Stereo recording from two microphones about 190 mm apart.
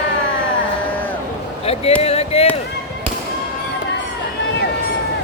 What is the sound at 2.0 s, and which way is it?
Basketball bounce, 30° left (ahead or behind).